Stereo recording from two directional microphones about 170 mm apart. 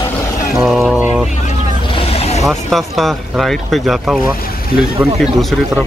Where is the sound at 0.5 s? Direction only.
Centre (ahead or behind).